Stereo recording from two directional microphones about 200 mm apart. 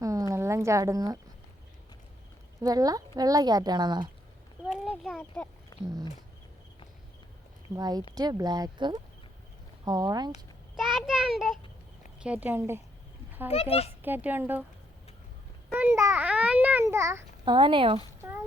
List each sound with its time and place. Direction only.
0.0 s a sound: 15° right (ahead or behind)
2.6 s speech: 15° right (ahead or behind)
4.9 s a sound: centre (ahead or behind)
5.8 s a child's voice: 20° right (ahead or behind)
7.8 s speech: 20° right (ahead or behind)
10.8 s a child's voice: centre (ahead or behind)
13.5 s a child's voice: 30° left (ahead or behind)
14.0 s a child's voice: 10° right (ahead or behind)
15.7 s a child's voice: 10° right (ahead or behind)
17.4 s speech: 25° right (ahead or behind)